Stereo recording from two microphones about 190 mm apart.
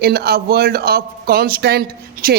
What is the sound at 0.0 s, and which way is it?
A woman's voice, 55° right (ahead or behind).